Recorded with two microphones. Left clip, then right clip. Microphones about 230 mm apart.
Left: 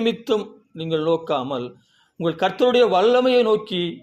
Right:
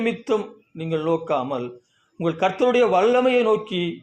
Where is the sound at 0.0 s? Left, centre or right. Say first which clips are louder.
Left 1 dB; left.